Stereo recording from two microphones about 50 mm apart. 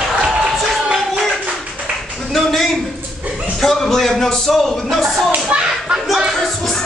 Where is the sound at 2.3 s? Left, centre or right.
Centre.